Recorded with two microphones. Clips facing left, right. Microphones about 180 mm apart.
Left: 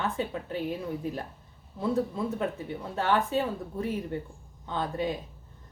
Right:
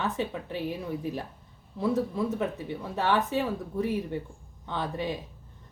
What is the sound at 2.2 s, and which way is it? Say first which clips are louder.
Speech: right 1 dB; 20° right (ahead or behind).